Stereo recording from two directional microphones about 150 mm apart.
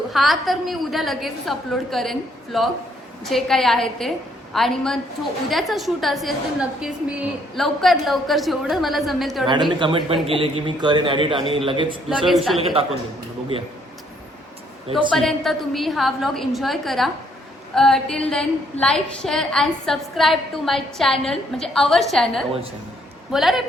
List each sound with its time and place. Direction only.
0.1 s a woman's voice: centre (ahead or behind)
9.5 s a man's voice: 30° right (ahead or behind)
12.0 s a woman's voice: centre (ahead or behind)
15.1 s a woman's voice: centre (ahead or behind)